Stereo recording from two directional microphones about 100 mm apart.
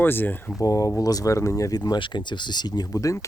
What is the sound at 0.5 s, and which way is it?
Speech, 35° left (ahead or behind).